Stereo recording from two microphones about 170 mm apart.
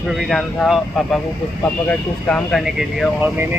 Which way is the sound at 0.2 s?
Centre (ahead or behind).